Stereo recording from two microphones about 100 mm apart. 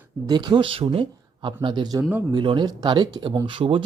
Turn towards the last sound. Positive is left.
turn(degrees=-60)  # may be behind; listen again after turning